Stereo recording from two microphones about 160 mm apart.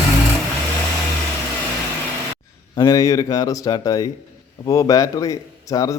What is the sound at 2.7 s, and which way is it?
A man's voice, 25° left (ahead or behind).